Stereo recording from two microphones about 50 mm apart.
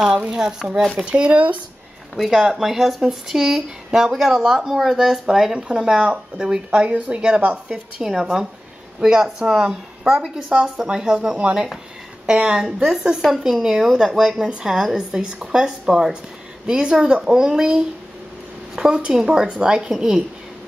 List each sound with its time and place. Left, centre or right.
0.3 s a woman's voice: centre
2.1 s a woman's voice: centre
8.0 s a woman's voice: centre